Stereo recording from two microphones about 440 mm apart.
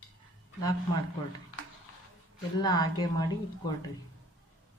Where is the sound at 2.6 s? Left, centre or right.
Centre.